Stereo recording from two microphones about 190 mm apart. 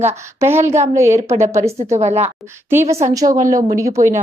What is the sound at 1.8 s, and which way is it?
Speech, 35° right (ahead or behind).